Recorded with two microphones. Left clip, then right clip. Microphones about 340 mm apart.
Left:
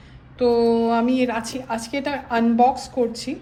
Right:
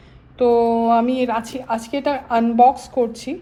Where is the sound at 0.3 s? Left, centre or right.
Centre.